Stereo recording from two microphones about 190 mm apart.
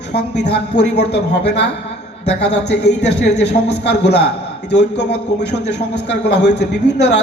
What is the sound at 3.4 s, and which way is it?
Speech, 60° left (ahead or behind).